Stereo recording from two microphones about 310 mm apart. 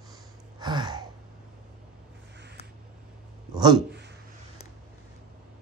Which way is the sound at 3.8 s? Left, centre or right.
Right.